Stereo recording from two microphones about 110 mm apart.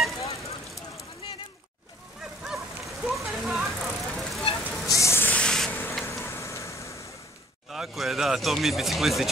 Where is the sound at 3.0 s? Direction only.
5° right (ahead or behind).